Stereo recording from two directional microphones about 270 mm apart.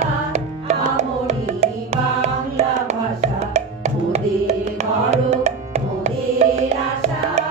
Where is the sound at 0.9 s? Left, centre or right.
Right.